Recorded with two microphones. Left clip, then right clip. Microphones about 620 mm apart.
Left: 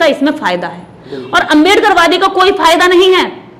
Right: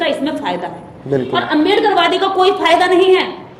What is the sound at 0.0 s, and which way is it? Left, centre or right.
A woman's voice, left.